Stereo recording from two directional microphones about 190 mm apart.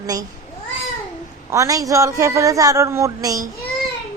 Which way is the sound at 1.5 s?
15° right (ahead or behind).